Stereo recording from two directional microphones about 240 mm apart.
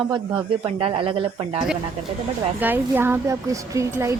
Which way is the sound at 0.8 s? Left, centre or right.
Right.